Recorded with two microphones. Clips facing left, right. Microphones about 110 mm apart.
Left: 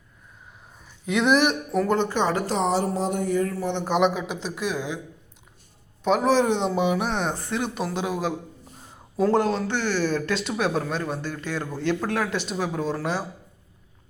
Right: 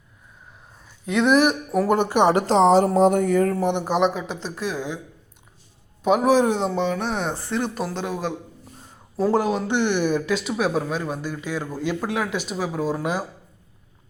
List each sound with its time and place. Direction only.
0.8 s speech: centre (ahead or behind)
1.9 s speech: 15° right (ahead or behind)
2.6 s speech: 75° right (ahead or behind); by 3.6 s 55° right (ahead or behind)
3.6 s speech: 15° right (ahead or behind)
3.8 s speech: centre (ahead or behind)
6.0 s speech: 5° right (ahead or behind)
6.7 s speech: 10° left (ahead or behind)
9.2 s speech: 10° right (ahead or behind)